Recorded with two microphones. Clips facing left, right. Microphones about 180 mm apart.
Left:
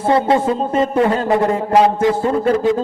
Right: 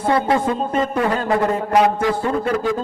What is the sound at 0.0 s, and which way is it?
A man's voice, 25° left (ahead or behind).